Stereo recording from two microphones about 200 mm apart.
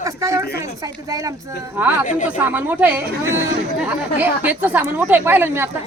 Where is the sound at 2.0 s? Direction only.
40° left (ahead or behind).